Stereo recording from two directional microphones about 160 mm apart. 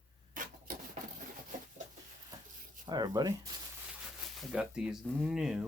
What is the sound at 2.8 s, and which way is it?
Speech, 25° right (ahead or behind).